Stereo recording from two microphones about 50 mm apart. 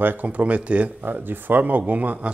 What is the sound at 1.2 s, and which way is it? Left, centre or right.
Speech, right.